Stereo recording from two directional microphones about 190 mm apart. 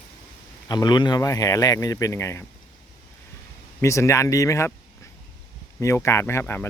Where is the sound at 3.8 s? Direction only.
15° left (ahead or behind).